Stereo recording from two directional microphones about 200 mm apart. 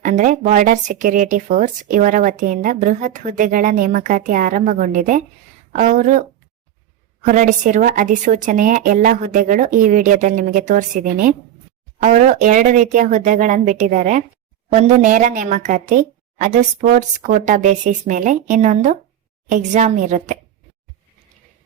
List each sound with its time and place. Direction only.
0.0 s speech: 40° right (ahead or behind)
7.3 s speech: 40° right (ahead or behind)